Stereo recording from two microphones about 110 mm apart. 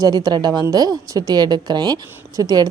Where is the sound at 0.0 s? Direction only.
35° right (ahead or behind).